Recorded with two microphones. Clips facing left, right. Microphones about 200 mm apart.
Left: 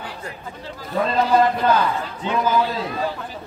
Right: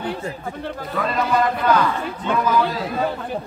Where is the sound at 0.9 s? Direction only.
25° left (ahead or behind).